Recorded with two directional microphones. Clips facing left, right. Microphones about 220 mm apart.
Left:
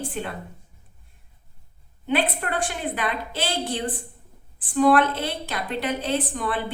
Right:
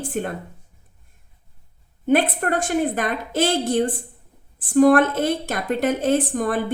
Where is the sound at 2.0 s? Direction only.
45° right (ahead or behind).